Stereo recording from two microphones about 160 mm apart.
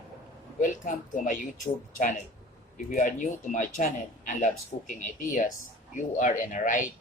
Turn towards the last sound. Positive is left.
turn(degrees=55)  # may be behind; listen again after turning